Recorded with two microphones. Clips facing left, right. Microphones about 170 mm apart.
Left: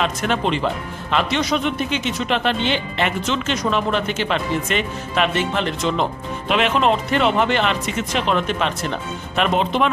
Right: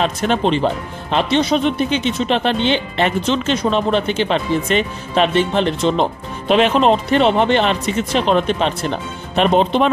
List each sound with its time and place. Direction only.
0.0 s speech: 30° right (ahead or behind)